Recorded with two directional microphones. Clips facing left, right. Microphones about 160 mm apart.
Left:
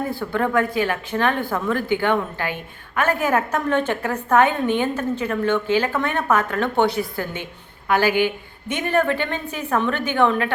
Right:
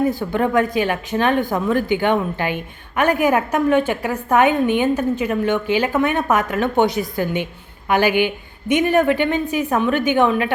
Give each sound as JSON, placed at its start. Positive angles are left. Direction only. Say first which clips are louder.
{"t": 0.1, "sound": "speech", "louder": "right 3 dB", "side_deg": -15}